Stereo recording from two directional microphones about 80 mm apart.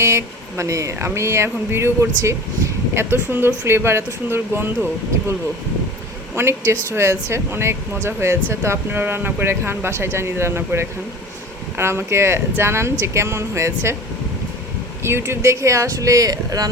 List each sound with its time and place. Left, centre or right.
0.0 s speech: right
6.3 s speech: right
15.0 s speech: right